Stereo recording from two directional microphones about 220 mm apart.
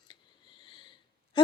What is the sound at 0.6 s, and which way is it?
Wheeze, 20° left (ahead or behind).